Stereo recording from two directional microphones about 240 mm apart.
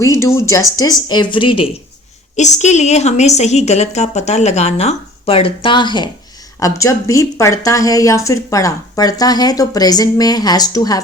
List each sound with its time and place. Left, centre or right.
0.0 s a woman's voice: centre